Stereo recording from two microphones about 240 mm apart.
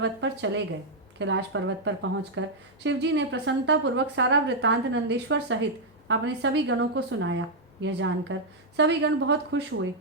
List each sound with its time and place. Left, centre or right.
0.0 s a woman's voice: right